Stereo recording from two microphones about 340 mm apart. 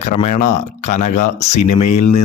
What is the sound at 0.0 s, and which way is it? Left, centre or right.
Speech, left.